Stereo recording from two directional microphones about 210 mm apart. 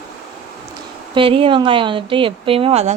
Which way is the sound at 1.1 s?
25° right (ahead or behind).